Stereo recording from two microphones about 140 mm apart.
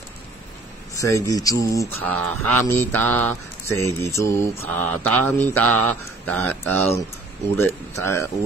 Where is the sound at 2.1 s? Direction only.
15° left (ahead or behind).